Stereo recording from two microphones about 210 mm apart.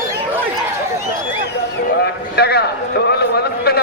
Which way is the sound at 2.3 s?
50° left (ahead or behind).